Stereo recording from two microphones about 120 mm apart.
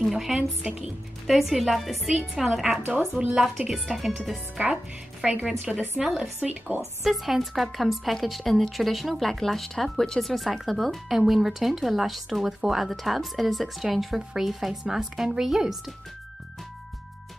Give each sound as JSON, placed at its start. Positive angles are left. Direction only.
{"t": 0.0, "sound": "a woman's voice", "side_deg": -5}
{"t": 2.8, "sound": "speech", "side_deg": -15}
{"t": 3.3, "sound": "a woman's voice", "side_deg": -5}